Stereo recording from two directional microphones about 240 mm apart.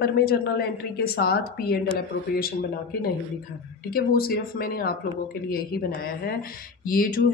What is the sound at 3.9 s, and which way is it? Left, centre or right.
A woman's voice, left.